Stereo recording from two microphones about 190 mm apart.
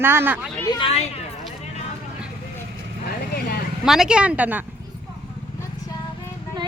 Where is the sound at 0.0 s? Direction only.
10° right (ahead or behind).